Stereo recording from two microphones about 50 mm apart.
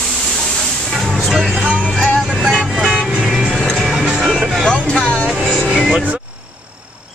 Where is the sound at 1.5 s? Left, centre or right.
Centre.